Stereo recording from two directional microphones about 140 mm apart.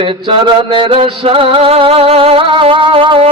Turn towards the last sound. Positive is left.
turn(degrees=-40)  # may be behind; listen again after turning